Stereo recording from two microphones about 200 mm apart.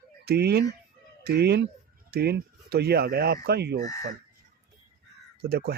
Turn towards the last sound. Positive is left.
turn(degrees=-55)  # may be behind; listen again after turning